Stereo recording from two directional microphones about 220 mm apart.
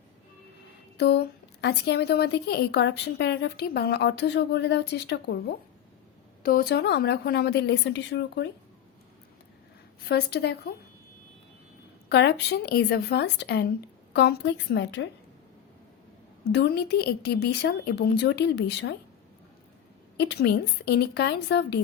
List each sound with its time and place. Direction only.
0.9 s a sound: 50° left (ahead or behind)
1.6 s a woman's voice: 50° left (ahead or behind)
6.4 s a woman's voice: 40° left (ahead or behind)
10.1 s a woman's voice: 45° left (ahead or behind)
12.0 s a woman's voice: 50° left (ahead or behind)
16.4 s a woman's voice: 50° left (ahead or behind)
20.1 s a woman's voice: 50° left (ahead or behind)